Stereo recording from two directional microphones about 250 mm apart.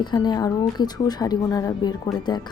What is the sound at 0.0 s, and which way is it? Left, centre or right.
Speech, centre.